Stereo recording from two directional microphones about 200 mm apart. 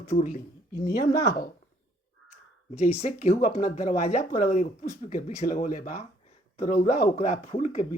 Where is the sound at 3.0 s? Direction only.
35° left (ahead or behind).